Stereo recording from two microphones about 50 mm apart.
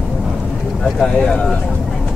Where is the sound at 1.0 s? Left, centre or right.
Centre.